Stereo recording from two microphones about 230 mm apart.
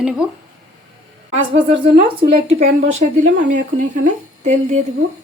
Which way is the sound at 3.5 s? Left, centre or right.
Right.